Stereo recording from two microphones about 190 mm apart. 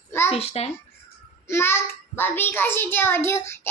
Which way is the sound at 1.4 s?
15° left (ahead or behind).